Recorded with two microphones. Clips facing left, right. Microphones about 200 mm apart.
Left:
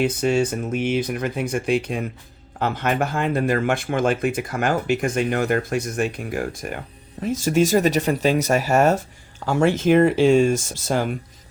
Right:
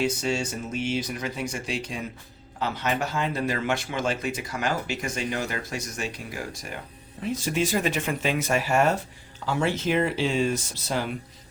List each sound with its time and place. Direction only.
0.0 s speech: 55° left (ahead or behind)
7.2 s speech: 45° left (ahead or behind)